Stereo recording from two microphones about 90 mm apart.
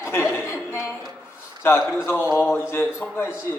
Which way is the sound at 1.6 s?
25° left (ahead or behind).